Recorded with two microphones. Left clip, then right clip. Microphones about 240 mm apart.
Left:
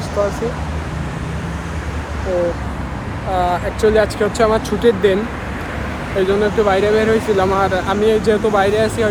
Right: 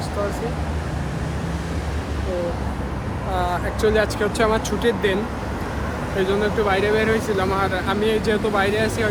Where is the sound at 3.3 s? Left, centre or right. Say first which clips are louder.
Left 6 dB; centre.